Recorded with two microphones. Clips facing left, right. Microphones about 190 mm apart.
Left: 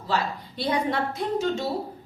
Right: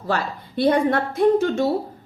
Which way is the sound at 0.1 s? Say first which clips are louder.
Right 3 dB; 55° right (ahead or behind).